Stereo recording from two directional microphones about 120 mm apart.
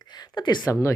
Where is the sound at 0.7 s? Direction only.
25° left (ahead or behind).